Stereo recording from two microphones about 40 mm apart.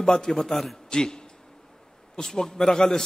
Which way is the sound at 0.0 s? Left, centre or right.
Centre.